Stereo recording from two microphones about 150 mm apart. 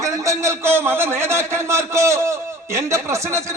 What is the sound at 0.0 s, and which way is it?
A man's voice, 20° right (ahead or behind).